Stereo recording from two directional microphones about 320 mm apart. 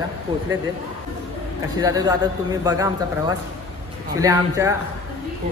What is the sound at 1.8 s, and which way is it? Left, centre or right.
A man's voice, centre.